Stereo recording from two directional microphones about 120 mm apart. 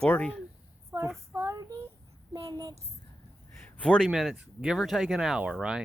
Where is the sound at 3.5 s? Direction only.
15° left (ahead or behind).